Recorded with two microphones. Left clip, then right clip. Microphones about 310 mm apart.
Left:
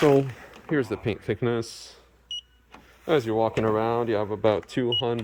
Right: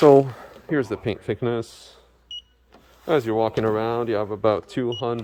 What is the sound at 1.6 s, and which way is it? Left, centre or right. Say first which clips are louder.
Speech: left 1 dB; right.